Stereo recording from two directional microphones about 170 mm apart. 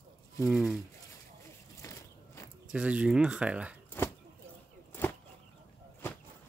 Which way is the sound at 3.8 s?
15° left (ahead or behind).